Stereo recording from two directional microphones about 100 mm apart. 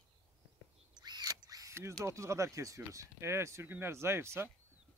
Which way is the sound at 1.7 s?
25° right (ahead or behind).